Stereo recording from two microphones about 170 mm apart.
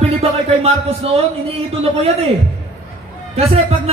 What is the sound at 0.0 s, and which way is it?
A man's voice, 35° right (ahead or behind).